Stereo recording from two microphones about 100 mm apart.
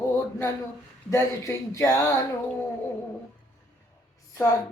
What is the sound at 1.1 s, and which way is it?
Female singing, 30° left (ahead or behind).